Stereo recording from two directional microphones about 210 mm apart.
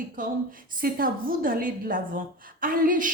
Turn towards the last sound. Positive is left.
turn(degrees=-40)  # may be behind; listen again after turning